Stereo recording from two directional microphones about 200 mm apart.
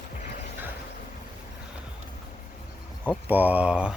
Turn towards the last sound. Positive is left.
turn(degrees=-5)  # may be behind; listen again after turning